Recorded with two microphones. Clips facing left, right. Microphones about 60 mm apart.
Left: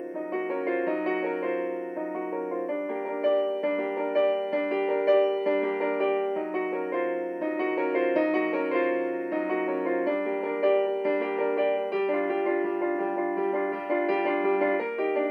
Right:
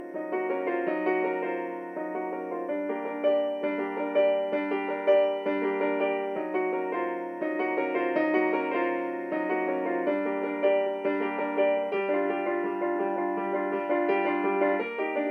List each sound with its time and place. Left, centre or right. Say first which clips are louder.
3.3 s music: left 1 dB; right
10.6 s music: left 1 dB; right
14.5 s music: left 1 dB; right